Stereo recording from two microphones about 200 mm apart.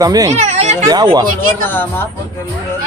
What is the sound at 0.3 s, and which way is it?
Speech, 35° right (ahead or behind).